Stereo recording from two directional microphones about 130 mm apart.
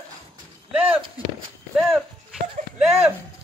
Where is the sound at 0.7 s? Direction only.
10° right (ahead or behind).